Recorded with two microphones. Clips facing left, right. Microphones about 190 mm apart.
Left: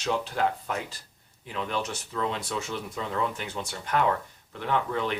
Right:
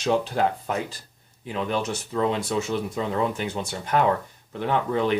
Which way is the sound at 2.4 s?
25° right (ahead or behind).